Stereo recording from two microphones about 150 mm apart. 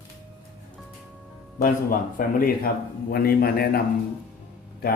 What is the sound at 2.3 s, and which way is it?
Speech, 75° left (ahead or behind).